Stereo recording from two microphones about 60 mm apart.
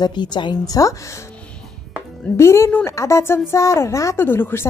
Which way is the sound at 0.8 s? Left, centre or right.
Left.